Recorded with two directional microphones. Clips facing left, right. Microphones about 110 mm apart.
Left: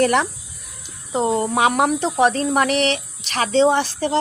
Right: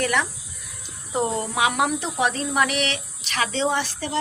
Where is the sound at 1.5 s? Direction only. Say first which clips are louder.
Left 3 dB; 40° left (ahead or behind).